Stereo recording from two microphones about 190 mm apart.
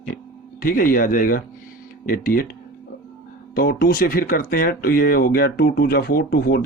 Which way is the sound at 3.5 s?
55° left (ahead or behind).